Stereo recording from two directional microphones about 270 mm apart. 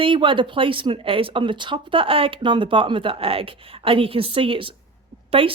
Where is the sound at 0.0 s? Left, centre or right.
Centre.